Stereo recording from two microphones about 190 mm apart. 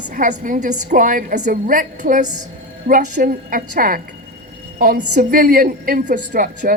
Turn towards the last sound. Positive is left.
turn(degrees=-45)  # may be behind; listen again after turning